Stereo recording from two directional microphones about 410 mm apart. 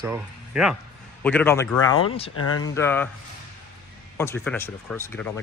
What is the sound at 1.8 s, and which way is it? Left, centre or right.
Speech, left.